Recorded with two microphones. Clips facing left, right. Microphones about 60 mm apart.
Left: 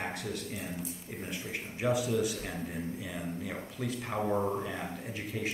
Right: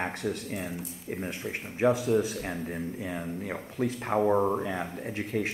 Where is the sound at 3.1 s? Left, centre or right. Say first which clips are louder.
Right 3 dB; right.